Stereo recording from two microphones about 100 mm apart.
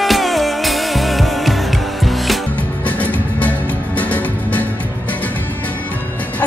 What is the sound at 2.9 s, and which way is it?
Music, 15° left (ahead or behind).